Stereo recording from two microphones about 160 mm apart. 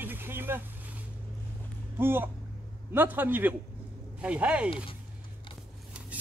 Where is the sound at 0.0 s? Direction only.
10° right (ahead or behind).